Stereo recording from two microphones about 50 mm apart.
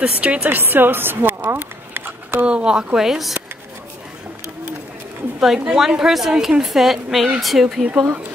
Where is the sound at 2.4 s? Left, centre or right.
Centre.